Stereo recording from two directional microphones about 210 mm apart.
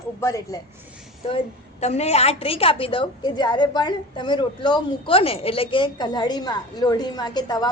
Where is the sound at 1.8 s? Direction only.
30° left (ahead or behind).